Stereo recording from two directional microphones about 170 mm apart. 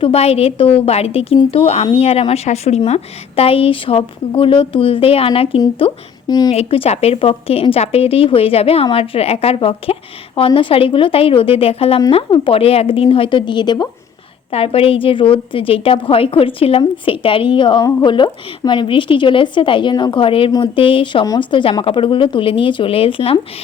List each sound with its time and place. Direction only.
0.0 s a woman's voice: 35° left (ahead or behind)
6.5 s a woman's voice: 35° left (ahead or behind)